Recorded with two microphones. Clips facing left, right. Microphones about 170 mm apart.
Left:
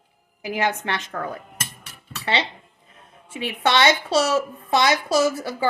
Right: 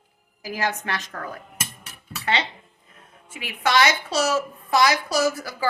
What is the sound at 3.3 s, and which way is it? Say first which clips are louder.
A woman's voice: left 1 dB; 30° left (ahead or behind).